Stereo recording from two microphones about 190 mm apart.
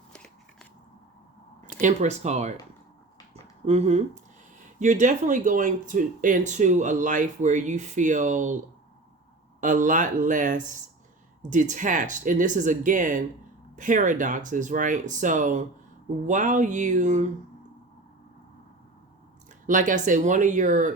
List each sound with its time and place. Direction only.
0.1 s a sound: 5° left (ahead or behind)
1.6 s speech: 40° right (ahead or behind)
9.6 s speech: 45° right (ahead or behind)
19.6 s speech: 45° right (ahead or behind)